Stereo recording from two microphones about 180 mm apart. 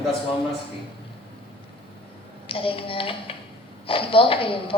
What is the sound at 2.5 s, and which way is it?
A woman's voice, 30° left (ahead or behind).